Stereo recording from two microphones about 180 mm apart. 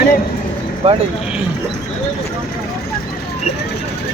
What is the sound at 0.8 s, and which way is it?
Speech, 35° right (ahead or behind).